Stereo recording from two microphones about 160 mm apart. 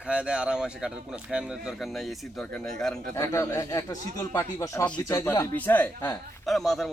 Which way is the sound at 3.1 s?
20° left (ahead or behind).